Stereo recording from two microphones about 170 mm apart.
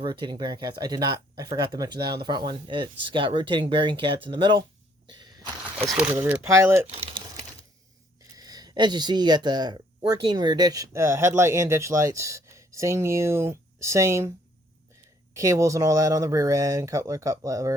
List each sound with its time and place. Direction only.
0.0 s speech: 25° right (ahead or behind)
5.0 s a sound: 25° right (ahead or behind)
5.8 s speech: 10° right (ahead or behind)
8.4 s speech: 25° right (ahead or behind)